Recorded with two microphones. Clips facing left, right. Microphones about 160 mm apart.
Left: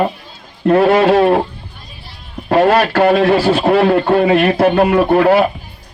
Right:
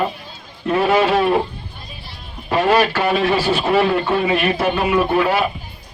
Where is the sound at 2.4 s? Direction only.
55° left (ahead or behind).